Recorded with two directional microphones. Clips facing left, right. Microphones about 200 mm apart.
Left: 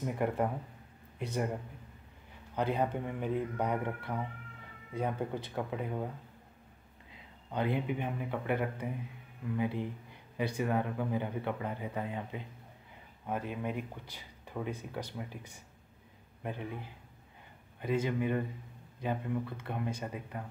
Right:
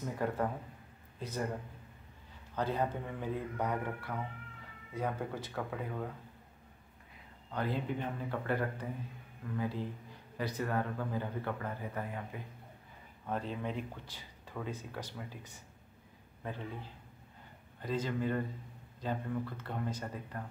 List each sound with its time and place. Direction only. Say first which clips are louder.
0.0 s speech: left 3 dB; 15° left (ahead or behind)
2.5 s speech: left 2 dB; 15° left (ahead or behind)
7.5 s speech: left 3 dB; 15° left (ahead or behind)